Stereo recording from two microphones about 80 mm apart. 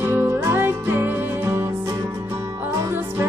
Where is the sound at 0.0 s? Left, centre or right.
Right.